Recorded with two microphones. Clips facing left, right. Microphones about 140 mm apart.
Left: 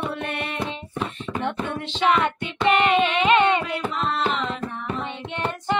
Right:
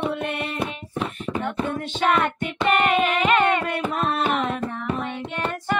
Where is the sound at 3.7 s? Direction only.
55° right (ahead or behind).